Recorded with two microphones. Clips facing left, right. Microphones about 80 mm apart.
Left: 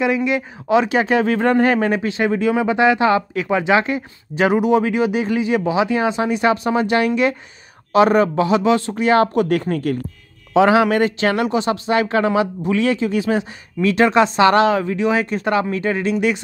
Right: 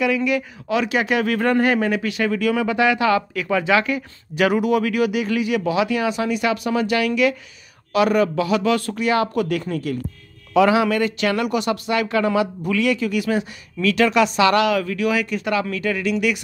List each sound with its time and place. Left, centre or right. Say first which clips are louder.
0.0 s a man's voice: left 2 dB; left
10.5 s speech: left 3 dB; left